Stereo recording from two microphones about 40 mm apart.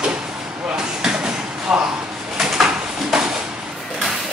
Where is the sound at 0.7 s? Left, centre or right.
Right.